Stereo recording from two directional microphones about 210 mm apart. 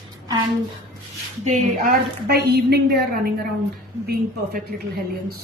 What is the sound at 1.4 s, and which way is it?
Speech, 35° right (ahead or behind).